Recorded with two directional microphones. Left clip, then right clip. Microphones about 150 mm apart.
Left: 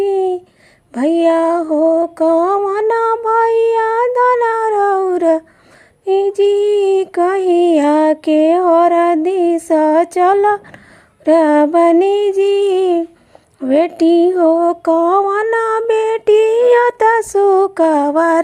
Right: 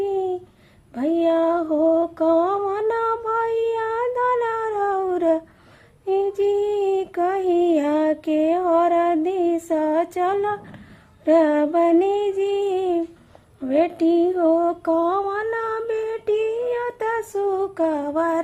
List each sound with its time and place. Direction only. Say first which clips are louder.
0.0 s a sound: left 8 dB; 40° left (ahead or behind)
0.9 s female singing: left 7 dB; 40° left (ahead or behind)
13.6 s mantra: left 7 dB; 45° left (ahead or behind)